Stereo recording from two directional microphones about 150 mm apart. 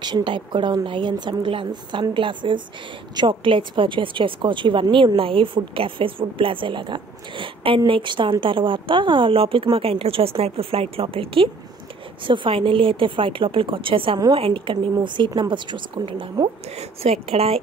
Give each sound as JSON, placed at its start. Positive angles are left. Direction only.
{"t": 0.0, "sound": "speech", "side_deg": -30}